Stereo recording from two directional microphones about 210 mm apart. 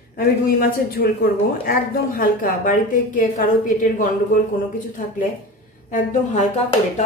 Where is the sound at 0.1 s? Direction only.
45° left (ahead or behind).